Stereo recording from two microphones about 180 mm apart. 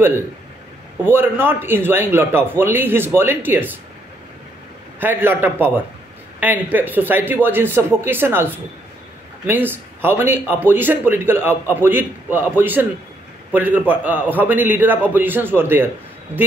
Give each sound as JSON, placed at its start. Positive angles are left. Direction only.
{"t": 1.0, "sound": "a man's voice", "side_deg": -10}
{"t": 5.0, "sound": "a man's voice", "side_deg": -10}
{"t": 9.5, "sound": "a man's voice", "side_deg": -10}